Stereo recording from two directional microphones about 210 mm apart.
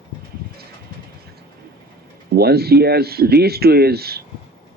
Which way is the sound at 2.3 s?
50° right (ahead or behind).